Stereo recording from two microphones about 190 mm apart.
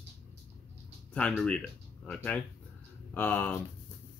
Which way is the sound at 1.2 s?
5° left (ahead or behind).